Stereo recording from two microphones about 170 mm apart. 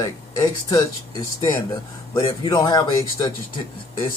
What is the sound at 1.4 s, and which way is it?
Speech, 25° left (ahead or behind).